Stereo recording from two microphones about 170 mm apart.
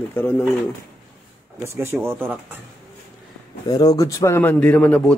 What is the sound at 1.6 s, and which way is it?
Speech, 15° right (ahead or behind).